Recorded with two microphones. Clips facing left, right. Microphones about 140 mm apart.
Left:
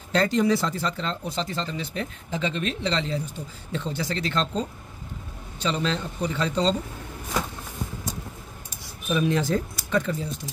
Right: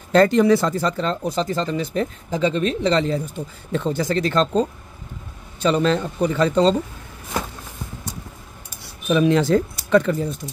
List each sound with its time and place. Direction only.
0.1 s speech: 55° right (ahead or behind)
9.1 s speech: 80° right
9.8 s speech: 65° right (ahead or behind)